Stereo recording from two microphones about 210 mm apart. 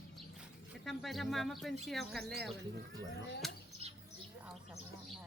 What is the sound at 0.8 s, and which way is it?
Speech, centre (ahead or behind).